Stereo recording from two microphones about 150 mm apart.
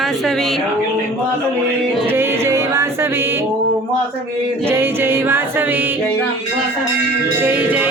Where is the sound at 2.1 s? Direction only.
15° right (ahead or behind).